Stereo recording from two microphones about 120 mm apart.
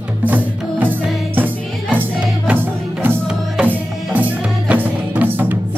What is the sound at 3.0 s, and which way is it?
Music, 15° right (ahead or behind).